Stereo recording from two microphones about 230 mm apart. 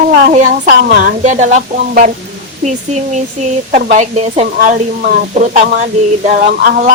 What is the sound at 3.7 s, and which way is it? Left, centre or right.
Speech, right.